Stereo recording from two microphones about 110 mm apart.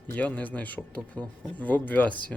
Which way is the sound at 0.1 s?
15° left (ahead or behind).